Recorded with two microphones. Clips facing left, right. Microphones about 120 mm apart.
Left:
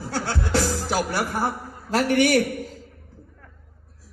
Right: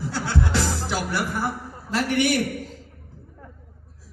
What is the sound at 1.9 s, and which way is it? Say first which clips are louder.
Speech: left 3 dB; 45° left (ahead or behind).